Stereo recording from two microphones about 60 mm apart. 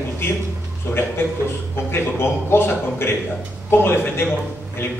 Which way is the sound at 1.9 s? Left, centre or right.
Left.